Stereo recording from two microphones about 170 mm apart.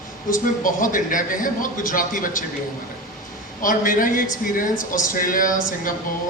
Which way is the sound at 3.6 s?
55° left (ahead or behind).